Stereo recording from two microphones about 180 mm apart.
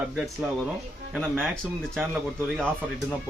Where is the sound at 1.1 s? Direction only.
5° right (ahead or behind).